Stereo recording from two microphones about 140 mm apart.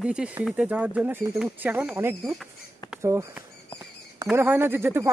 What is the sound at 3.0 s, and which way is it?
Speech, 20° right (ahead or behind).